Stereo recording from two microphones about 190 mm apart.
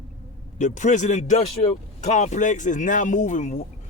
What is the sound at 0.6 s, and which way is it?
Speech, 40° left (ahead or behind).